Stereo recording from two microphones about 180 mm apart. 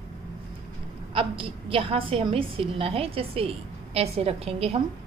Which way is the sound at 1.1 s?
30° right (ahead or behind).